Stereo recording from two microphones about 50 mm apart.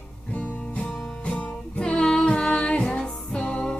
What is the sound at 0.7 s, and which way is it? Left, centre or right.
Music, left.